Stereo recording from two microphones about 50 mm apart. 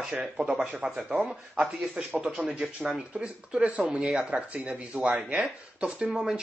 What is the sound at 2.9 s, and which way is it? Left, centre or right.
Speech, centre.